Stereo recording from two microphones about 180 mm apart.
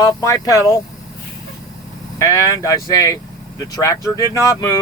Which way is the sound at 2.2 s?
15° left (ahead or behind).